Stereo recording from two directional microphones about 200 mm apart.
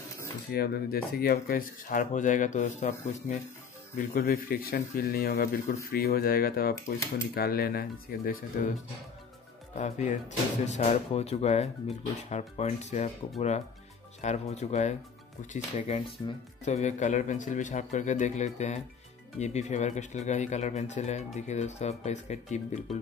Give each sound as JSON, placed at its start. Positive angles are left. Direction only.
{"t": 0.5, "sound": "speech", "side_deg": 50}
{"t": 4.1, "sound": "speech", "side_deg": 45}
{"t": 9.8, "sound": "speech", "side_deg": 35}
{"t": 14.2, "sound": "speech", "side_deg": 35}